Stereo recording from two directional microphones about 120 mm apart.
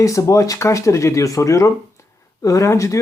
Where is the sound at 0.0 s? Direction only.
25° left (ahead or behind).